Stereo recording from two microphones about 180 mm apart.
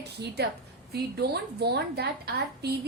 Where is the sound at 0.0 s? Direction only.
65° right (ahead or behind).